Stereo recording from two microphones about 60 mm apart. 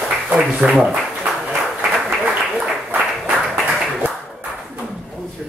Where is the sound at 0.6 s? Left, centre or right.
Right.